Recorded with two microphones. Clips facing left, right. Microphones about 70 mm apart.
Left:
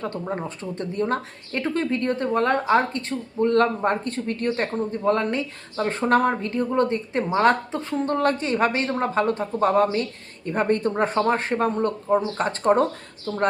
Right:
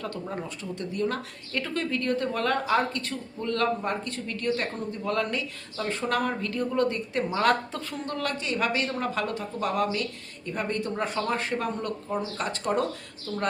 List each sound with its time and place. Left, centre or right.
0.0 s speech: left